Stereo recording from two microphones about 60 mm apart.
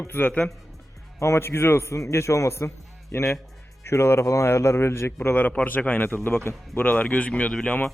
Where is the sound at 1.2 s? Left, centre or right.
Left.